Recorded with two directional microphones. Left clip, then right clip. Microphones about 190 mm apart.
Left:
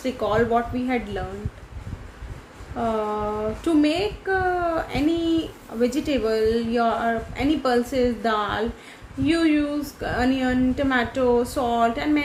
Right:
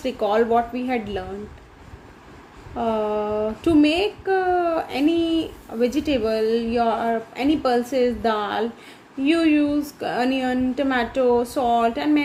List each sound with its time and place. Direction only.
0.0 s speech: 30° right (ahead or behind)
2.7 s speech: 25° right (ahead or behind)